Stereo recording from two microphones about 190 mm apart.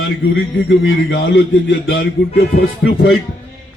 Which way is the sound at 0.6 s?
85° left.